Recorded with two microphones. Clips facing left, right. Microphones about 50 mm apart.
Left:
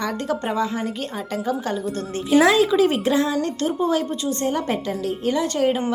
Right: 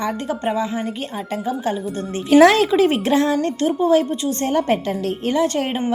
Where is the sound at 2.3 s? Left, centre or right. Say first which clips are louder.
Right 4 dB; right.